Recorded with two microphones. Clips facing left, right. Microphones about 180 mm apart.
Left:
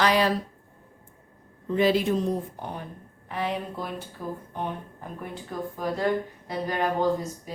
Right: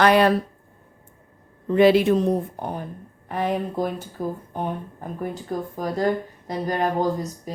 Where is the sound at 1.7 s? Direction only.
70° right (ahead or behind).